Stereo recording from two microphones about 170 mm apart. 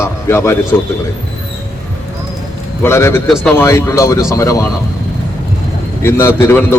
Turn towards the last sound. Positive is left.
turn(degrees=15)  # may be behind; listen again after turning